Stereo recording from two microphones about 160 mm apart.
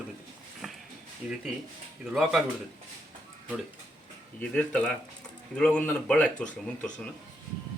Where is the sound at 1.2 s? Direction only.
5° right (ahead or behind).